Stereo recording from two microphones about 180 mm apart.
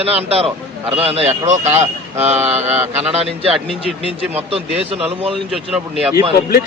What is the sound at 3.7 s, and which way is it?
Speech, 30° left (ahead or behind).